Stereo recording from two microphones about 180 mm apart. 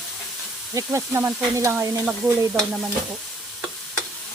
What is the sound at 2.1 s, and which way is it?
Stir, 5° left (ahead or behind).